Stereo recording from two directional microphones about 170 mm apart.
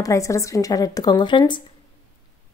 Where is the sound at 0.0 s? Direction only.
20° left (ahead or behind).